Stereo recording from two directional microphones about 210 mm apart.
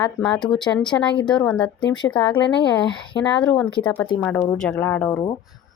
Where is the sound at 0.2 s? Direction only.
5° left (ahead or behind).